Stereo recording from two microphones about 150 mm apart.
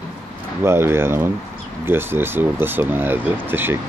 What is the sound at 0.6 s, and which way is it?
Speech, 15° right (ahead or behind).